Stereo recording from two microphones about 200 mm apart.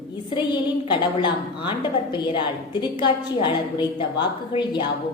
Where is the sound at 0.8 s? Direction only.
25° left (ahead or behind).